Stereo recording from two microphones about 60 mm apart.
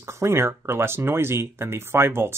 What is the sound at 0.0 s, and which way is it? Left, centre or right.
Speech, right.